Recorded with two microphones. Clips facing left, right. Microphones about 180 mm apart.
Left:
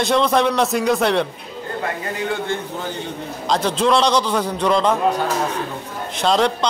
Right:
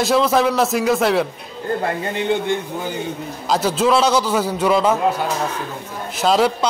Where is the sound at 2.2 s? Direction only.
20° right (ahead or behind).